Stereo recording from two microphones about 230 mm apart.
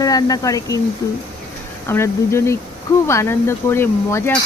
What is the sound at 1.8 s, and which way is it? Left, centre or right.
Speech, centre.